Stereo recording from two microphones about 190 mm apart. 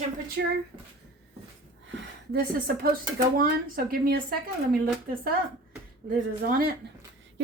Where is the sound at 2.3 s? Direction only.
50° right (ahead or behind).